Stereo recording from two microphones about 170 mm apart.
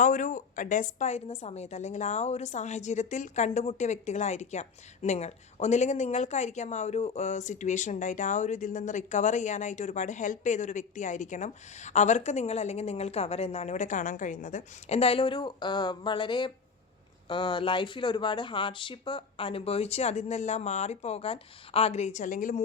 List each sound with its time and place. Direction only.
0.0 s speech: 50° left (ahead or behind)